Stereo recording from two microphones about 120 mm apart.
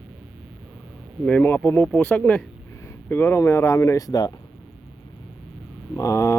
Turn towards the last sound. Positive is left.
turn(degrees=25)  # may be behind; listen again after turning